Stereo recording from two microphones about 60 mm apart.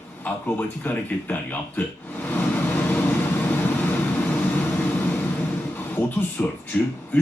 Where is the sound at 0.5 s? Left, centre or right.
Left.